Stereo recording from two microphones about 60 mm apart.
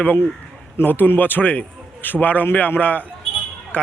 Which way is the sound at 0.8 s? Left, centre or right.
Left.